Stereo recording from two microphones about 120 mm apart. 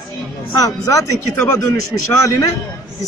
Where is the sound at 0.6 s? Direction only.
30° left (ahead or behind).